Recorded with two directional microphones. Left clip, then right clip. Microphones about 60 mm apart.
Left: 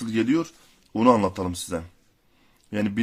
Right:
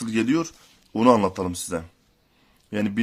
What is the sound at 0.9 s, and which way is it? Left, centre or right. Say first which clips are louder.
Speech: right 1 dB; right.